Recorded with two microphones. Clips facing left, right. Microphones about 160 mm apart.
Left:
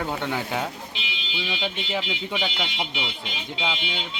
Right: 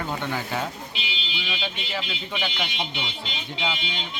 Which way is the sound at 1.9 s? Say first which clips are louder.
Left 2 dB; 15° left (ahead or behind).